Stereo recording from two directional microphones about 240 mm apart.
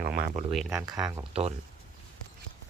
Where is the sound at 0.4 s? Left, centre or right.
Centre.